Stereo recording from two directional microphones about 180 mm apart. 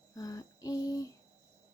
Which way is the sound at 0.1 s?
20° left (ahead or behind).